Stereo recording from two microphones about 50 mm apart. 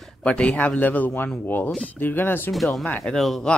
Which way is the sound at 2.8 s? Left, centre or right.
Left.